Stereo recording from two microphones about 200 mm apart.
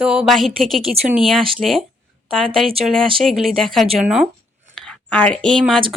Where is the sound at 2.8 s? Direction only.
5° left (ahead or behind).